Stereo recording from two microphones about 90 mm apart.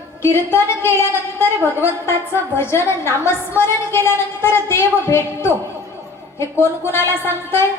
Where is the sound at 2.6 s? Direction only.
30° left (ahead or behind).